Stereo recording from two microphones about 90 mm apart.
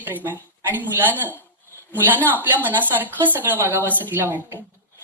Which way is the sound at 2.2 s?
20° left (ahead or behind).